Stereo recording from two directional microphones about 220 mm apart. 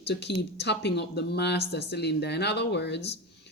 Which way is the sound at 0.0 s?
50° left (ahead or behind).